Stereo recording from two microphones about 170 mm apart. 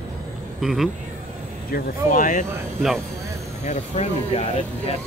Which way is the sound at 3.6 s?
40° left (ahead or behind).